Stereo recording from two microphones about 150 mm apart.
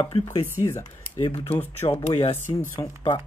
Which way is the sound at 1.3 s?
40° left (ahead or behind).